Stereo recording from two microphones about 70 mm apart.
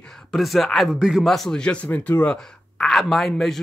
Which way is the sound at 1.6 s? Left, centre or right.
Centre.